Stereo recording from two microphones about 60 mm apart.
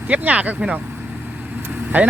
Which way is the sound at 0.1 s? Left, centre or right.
Right.